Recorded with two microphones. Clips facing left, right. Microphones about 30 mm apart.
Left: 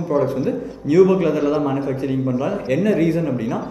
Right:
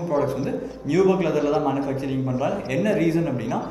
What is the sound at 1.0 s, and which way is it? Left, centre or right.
A man's voice, centre.